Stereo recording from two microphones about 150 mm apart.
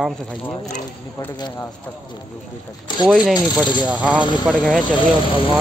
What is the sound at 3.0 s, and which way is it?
Speech, 5° right (ahead or behind).